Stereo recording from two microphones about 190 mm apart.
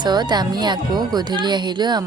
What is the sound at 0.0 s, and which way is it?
Speech, 20° right (ahead or behind).